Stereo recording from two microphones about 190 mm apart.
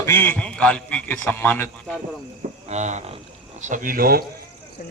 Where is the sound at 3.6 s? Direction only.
40° right (ahead or behind).